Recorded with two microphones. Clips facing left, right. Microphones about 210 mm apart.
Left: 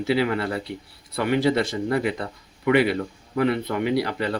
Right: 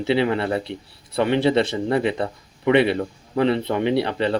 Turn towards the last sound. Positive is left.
turn(degrees=-25)  # may be behind; listen again after turning